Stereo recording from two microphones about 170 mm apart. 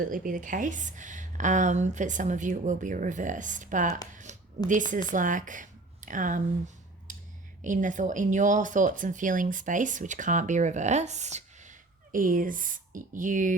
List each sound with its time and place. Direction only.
0.0 s speech: 55° right (ahead or behind)
7.1 s a sound: 50° right (ahead or behind)
7.6 s speech: 50° right (ahead or behind)